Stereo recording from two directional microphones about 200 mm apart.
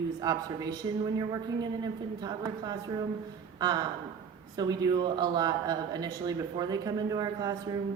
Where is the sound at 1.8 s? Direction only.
20° right (ahead or behind).